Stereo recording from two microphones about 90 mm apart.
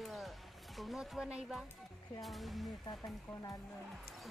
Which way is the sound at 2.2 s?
Centre (ahead or behind).